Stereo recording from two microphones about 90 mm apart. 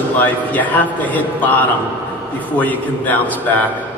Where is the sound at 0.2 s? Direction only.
20° left (ahead or behind).